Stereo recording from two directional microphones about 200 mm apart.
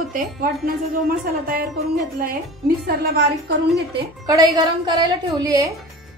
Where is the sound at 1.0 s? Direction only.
45° right (ahead or behind).